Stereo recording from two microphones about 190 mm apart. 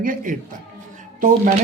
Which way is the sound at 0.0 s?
45° right (ahead or behind).